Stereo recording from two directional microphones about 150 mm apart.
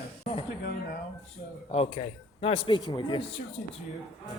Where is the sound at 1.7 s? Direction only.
40° left (ahead or behind).